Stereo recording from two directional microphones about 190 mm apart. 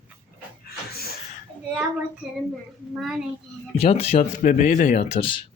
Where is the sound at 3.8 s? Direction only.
30° left (ahead or behind).